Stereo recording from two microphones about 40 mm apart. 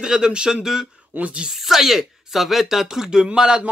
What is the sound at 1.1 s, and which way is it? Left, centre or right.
Speech, right.